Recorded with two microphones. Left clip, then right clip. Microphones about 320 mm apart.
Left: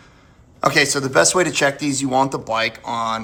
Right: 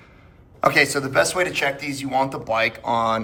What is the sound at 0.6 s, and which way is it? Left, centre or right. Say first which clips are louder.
A man's voice: left 1 dB; centre.